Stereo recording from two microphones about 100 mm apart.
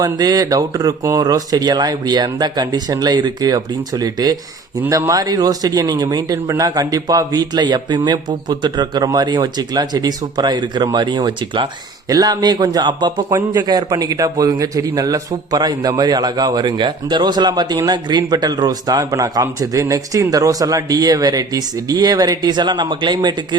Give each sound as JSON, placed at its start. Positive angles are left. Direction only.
{"t": 0.0, "sound": "speech", "side_deg": -40}
{"t": 12.0, "sound": "speech", "side_deg": -40}